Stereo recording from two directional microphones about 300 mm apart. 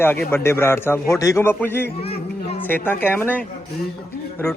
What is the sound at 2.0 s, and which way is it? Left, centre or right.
Music, centre.